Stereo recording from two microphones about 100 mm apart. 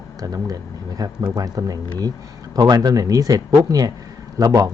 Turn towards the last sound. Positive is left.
turn(degrees=-40)  # may be behind; listen again after turning